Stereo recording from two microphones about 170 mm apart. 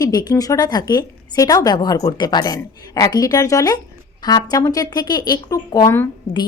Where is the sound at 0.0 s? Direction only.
25° left (ahead or behind).